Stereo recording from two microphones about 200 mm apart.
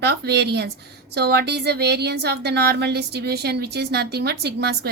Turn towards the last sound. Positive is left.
turn(degrees=-55)  # may be behind; listen again after turning